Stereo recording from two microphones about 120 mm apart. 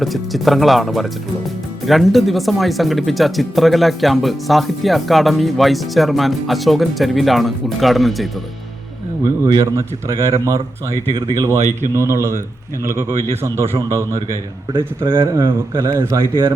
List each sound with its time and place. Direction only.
0.0 s speech: centre (ahead or behind)
9.2 s a man's voice: 30° right (ahead or behind)
11.6 s speech: 80° right
11.9 s a man's voice: 20° right (ahead or behind)
13.3 s a man's voice: 20° right (ahead or behind)
14.7 s speech: 45° right (ahead or behind)
15.4 s a man's voice: 20° right (ahead or behind)